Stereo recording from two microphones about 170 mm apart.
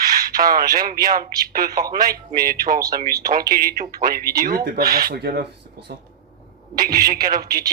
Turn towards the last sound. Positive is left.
turn(degrees=-60)  # may be behind; listen again after turning